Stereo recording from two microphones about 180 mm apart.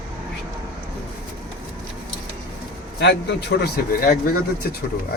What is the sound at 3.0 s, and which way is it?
Speech, 70° left (ahead or behind).